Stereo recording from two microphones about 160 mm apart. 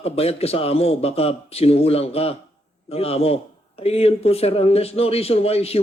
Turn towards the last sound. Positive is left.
turn(degrees=40)  # may be behind; listen again after turning